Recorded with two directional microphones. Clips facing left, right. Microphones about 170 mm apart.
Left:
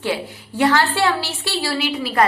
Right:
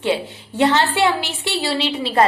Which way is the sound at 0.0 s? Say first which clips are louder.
Right 3 dB; 25° right (ahead or behind).